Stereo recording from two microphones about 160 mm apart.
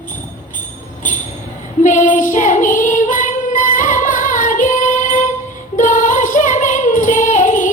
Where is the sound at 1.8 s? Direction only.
50° left (ahead or behind).